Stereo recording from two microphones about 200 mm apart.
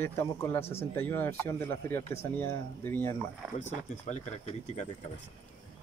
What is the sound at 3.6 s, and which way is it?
Speech, 35° left (ahead or behind).